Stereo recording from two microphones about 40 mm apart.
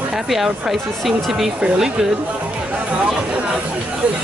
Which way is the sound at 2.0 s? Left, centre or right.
Centre.